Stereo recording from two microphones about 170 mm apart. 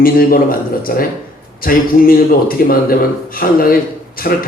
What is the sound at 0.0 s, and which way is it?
Speech, 60° left (ahead or behind).